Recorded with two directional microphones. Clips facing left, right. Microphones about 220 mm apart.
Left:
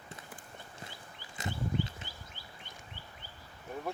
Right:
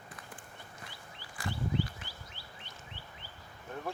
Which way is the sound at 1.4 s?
20° left (ahead or behind).